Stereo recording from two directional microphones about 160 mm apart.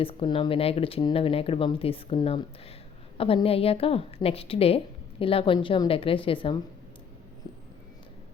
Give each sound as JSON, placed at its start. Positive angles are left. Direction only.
{"t": 0.0, "sound": "speech", "side_deg": 35}